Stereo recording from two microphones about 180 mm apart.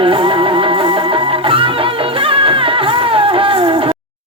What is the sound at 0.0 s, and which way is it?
Music, 30° right (ahead or behind).